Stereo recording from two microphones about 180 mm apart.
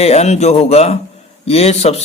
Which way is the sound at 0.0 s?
35° left (ahead or behind).